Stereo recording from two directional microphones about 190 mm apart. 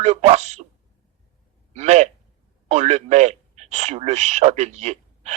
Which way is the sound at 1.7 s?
35° right (ahead or behind).